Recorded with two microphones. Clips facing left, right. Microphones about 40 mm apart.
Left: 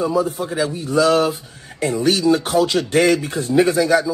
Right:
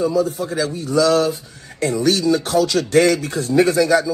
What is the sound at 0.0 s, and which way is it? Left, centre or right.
A man's voice, left.